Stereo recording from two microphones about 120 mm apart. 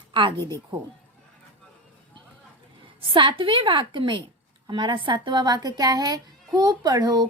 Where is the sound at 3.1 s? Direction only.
45° right (ahead or behind).